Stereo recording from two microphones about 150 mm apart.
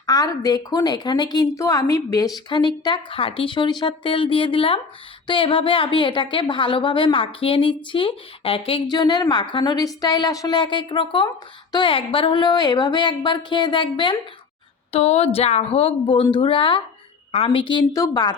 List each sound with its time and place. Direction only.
0.0 s a woman's voice: 25° left (ahead or behind)
14.9 s a woman's voice: 45° left (ahead or behind); by 18.3 s 25° left (ahead or behind)